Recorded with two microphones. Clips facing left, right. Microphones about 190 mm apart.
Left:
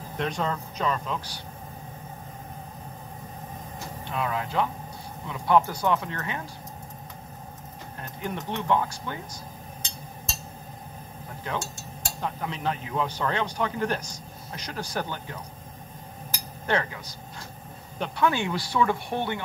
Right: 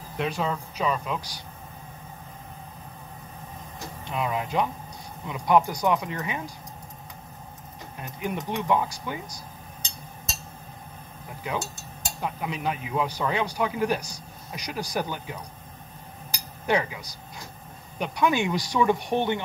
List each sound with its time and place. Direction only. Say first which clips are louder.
0.2 s a man's voice: right 1 dB; 5° right (ahead or behind)
4.1 s a man's voice: right 1 dB; 15° right (ahead or behind)
8.0 s a man's voice: right 2 dB; 15° right (ahead or behind)
11.4 s a man's voice: right 1 dB; 10° right (ahead or behind)
16.6 s a man's voice: right 2 dB; 10° right (ahead or behind)